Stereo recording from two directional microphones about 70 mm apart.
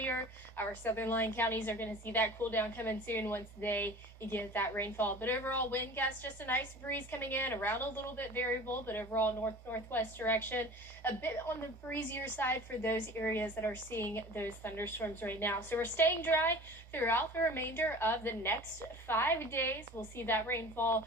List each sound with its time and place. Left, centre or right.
0.0 s a woman's voice: left